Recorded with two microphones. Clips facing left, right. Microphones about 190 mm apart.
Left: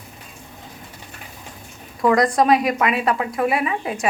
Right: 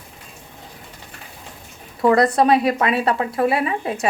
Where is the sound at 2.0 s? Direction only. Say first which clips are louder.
Right 1 dB; 30° right (ahead or behind).